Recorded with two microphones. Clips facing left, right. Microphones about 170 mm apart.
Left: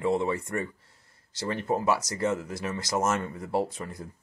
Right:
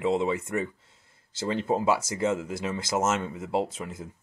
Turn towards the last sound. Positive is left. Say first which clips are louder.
# even
turn(degrees=-25)  # may be behind; listen again after turning